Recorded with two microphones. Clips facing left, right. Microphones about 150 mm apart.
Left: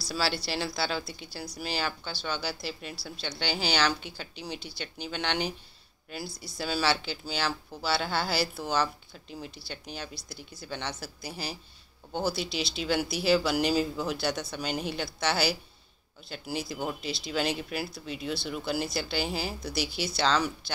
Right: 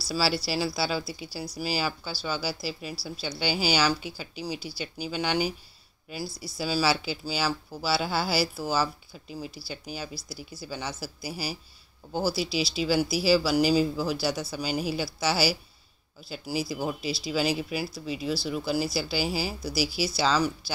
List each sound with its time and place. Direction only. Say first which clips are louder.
0.1 s speech: right 3 dB; 5° right (ahead or behind)